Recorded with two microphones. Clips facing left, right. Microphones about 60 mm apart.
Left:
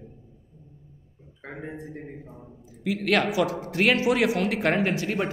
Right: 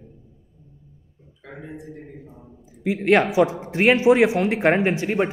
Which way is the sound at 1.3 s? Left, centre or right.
Left.